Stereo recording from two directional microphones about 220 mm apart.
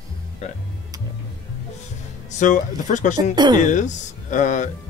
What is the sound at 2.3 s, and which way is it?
Speech, 35° left (ahead or behind).